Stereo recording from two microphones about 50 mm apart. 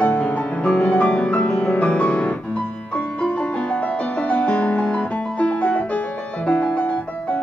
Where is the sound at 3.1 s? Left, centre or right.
Left.